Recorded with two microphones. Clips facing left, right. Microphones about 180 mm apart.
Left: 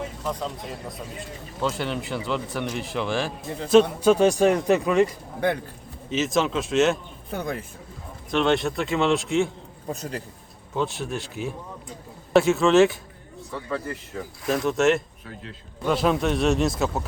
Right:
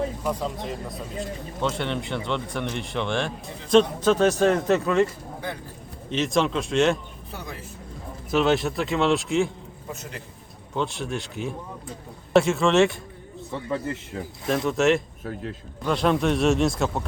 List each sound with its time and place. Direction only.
1.6 s speech: centre (ahead or behind)
6.1 s speech: centre (ahead or behind)
7.3 s speech: 55° left (ahead or behind)
8.3 s speech: 5° right (ahead or behind)
9.9 s a man's voice: 35° left (ahead or behind)
10.8 s speech: centre (ahead or behind)
13.5 s a man's voice: 20° right (ahead or behind)
14.4 s speech: centre (ahead or behind)